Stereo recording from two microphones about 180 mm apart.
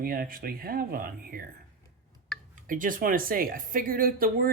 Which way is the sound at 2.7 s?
50° right (ahead or behind).